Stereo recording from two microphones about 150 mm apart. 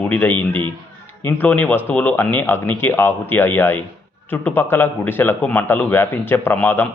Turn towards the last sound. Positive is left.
turn(degrees=15)  # may be behind; listen again after turning